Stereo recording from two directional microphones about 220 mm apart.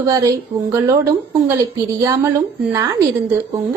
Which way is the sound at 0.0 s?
15° right (ahead or behind).